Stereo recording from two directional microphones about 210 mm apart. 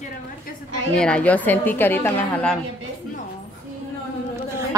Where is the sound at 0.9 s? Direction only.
5° left (ahead or behind).